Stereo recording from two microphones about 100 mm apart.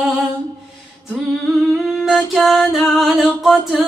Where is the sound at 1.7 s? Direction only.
5° right (ahead or behind).